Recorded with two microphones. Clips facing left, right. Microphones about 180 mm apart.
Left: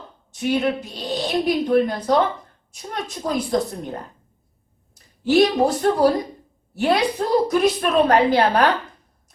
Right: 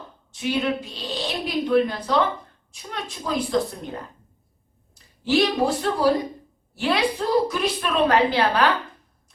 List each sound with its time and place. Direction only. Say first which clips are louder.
0.3 s a woman's voice: left 3 dB; 45° left (ahead or behind)
5.3 s a woman's voice: left 4 dB; 45° left (ahead or behind)